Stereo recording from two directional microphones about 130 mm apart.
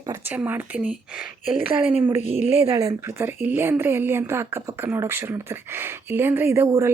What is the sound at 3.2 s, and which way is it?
Speech, 15° right (ahead or behind).